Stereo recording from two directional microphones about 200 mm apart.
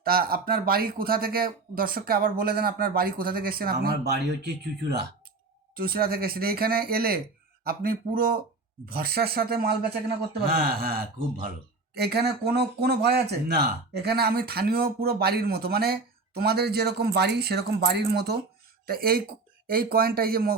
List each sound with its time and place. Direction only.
0.0 s speech: 50° right (ahead or behind)